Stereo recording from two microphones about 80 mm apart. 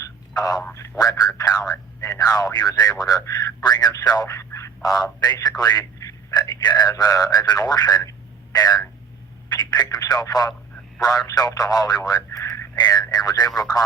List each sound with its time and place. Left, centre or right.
0.0 s telephone: left
0.9 s speech: left
4.8 s speech: left